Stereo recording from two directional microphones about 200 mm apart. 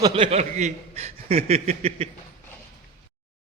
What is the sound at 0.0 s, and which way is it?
Speech, 30° right (ahead or behind).